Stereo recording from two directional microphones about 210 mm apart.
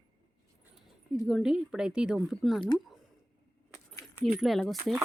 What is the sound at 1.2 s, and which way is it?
Speech, 5° right (ahead or behind).